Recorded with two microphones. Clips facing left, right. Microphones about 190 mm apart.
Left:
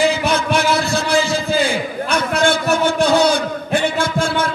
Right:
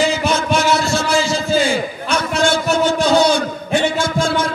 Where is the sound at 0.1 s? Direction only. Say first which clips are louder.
Even; 60° left (ahead or behind).